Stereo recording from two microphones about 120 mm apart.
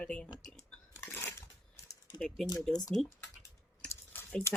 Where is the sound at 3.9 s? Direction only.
20° left (ahead or behind).